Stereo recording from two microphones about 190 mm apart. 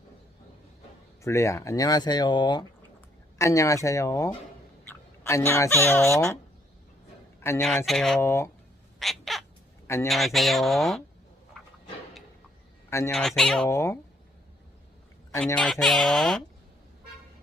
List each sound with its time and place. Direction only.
1.2 s speech: 15° left (ahead or behind)
7.6 s speech: 5° left (ahead or behind)
8.2 s speech: 15° left (ahead or behind)
9.0 s cat: centre (ahead or behind)
9.8 s a sound: 15° left (ahead or behind)
10.1 s speech: centre (ahead or behind)
13.1 s speech: 5° left (ahead or behind)
13.7 s speech: 15° left (ahead or behind)
15.4 s speech: 5° left (ahead or behind)